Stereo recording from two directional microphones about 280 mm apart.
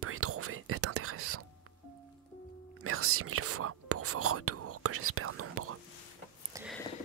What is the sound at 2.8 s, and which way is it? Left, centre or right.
Whispering, right.